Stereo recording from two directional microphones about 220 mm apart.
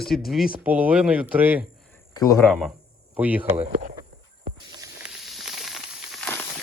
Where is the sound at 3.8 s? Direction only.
40° right (ahead or behind).